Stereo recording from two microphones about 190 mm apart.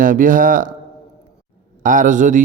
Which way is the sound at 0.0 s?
45° right (ahead or behind).